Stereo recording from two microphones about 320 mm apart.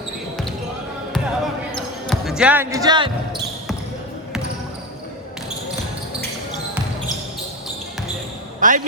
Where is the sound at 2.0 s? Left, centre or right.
Centre.